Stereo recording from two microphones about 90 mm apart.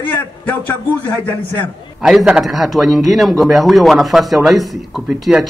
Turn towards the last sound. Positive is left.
turn(degrees=-5)  # may be behind; listen again after turning